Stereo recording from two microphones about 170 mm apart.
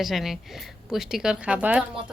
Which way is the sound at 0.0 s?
Centre (ahead or behind).